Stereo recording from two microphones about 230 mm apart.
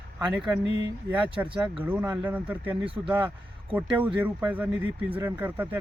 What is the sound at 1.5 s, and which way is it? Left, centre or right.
Speech, right.